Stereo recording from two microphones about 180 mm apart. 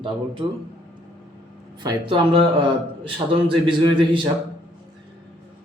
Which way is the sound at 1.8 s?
25° right (ahead or behind).